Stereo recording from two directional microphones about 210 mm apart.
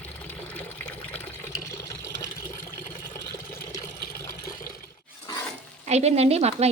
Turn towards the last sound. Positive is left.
turn(degrees=-30)  # may be behind; listen again after turning